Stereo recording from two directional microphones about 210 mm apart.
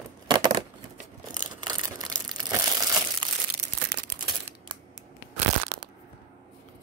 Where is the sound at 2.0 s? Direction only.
20° right (ahead or behind).